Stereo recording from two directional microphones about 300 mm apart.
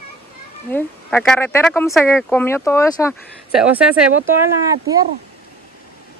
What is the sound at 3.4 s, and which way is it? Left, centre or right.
Speech, centre.